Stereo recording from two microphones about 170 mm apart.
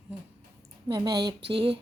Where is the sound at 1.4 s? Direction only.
30° right (ahead or behind).